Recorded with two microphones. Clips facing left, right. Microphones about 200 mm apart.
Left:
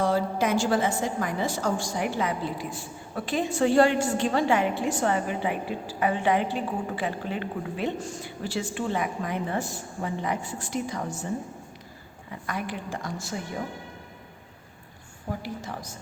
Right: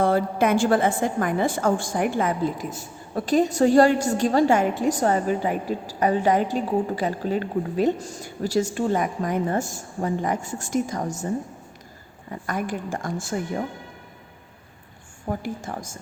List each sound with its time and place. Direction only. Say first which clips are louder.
0.0 s a woman's voice: right 4 dB; 55° right (ahead or behind)
12.3 s a woman's voice: right 5 dB; 45° right (ahead or behind)
15.3 s a woman's voice: right 4 dB; 50° right (ahead or behind)